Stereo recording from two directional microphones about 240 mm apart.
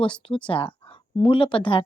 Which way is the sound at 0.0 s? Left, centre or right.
Left.